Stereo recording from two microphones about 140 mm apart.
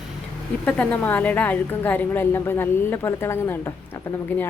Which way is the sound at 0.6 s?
10° left (ahead or behind).